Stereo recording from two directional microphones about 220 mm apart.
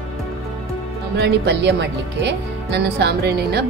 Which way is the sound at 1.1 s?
50° right (ahead or behind).